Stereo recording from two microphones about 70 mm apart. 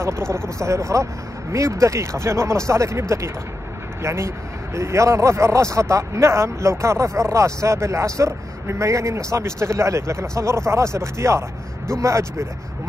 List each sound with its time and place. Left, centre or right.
0.0 s speech: right